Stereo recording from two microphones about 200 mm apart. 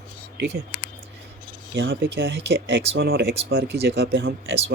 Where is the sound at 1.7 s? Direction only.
70° right (ahead or behind).